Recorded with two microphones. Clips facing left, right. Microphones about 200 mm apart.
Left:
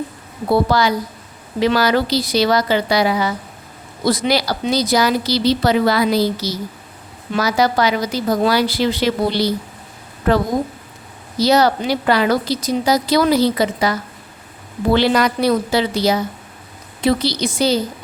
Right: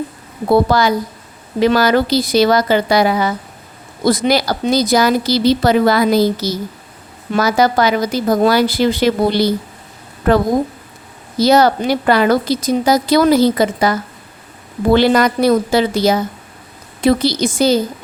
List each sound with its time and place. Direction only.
0.5 s a woman's voice: 50° right (ahead or behind)
11.3 s a woman's voice: 50° right (ahead or behind)